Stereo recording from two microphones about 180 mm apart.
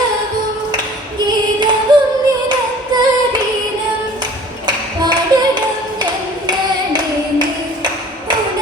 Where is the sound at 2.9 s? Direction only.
20° right (ahead or behind).